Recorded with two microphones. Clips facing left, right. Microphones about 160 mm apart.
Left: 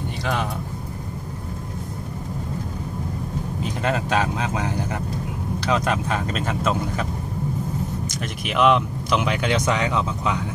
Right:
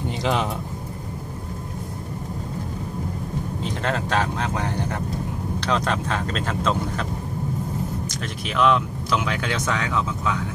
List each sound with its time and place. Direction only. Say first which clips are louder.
0.2 s speech: right 2 dB; 20° right (ahead or behind)
3.8 s speech: left 2 dB; 10° left (ahead or behind)
8.1 s speech: left 2 dB; 15° left (ahead or behind)